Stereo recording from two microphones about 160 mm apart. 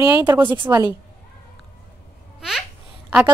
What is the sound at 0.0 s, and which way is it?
Speech, 10° right (ahead or behind).